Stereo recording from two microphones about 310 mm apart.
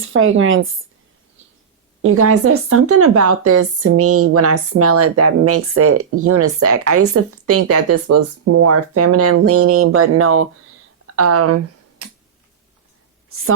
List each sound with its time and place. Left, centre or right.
0.0 s speech: right
2.0 s speech: right
11.0 s typing: right
13.3 s speech: right